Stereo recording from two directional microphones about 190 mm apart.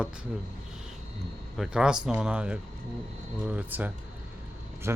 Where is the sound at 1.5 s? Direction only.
5° right (ahead or behind).